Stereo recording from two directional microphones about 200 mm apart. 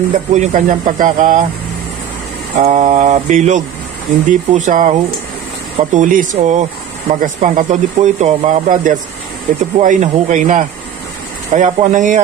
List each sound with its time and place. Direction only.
0.3 s speech: 35° right (ahead or behind)
2.6 s speech: 35° right (ahead or behind)